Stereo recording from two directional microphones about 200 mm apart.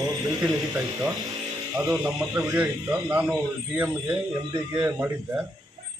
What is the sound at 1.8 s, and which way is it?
Speech, 15° right (ahead or behind).